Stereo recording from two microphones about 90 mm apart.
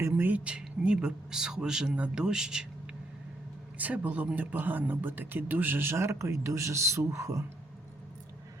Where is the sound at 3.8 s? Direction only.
15° right (ahead or behind); by 7.4 s 35° right (ahead or behind).